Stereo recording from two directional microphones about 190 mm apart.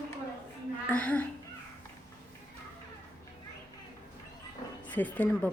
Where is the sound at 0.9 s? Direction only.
10° left (ahead or behind).